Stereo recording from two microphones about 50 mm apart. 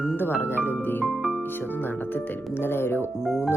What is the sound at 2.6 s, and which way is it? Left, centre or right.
Speech, left.